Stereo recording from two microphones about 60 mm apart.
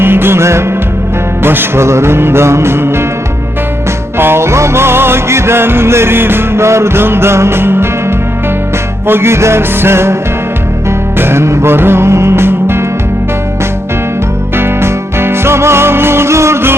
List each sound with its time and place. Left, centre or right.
0.0 s music: right
4.2 s music: right
9.0 s music: right
11.2 s music: right
14.5 s music: right